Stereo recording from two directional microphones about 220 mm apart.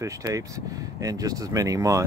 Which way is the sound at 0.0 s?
15° right (ahead or behind).